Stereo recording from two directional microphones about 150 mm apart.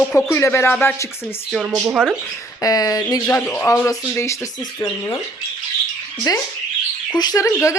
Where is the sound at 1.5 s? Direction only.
5° right (ahead or behind).